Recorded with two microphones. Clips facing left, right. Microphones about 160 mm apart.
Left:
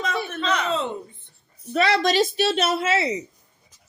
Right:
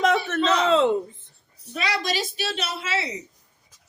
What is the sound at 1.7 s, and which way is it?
Speech, 50° left (ahead or behind).